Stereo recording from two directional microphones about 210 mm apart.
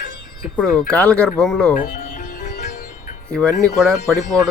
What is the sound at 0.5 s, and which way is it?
Speech, 5° left (ahead or behind).